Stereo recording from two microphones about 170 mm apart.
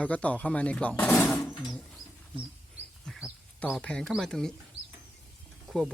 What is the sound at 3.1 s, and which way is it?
Speech, 5° right (ahead or behind).